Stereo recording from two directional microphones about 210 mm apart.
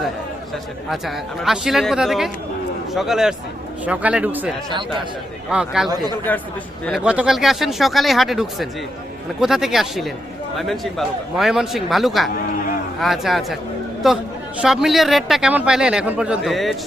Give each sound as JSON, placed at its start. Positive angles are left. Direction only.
{"t": 0.9, "sound": "a man's voice", "side_deg": 0}
{"t": 4.7, "sound": "speech", "side_deg": -20}
{"t": 5.5, "sound": "a man's voice", "side_deg": -5}
{"t": 5.9, "sound": "speech", "side_deg": -20}
{"t": 6.8, "sound": "a man's voice", "side_deg": -5}